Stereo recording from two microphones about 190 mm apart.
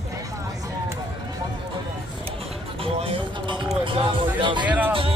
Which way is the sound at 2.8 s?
30° right (ahead or behind).